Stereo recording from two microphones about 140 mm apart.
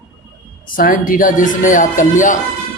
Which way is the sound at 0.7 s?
85° left.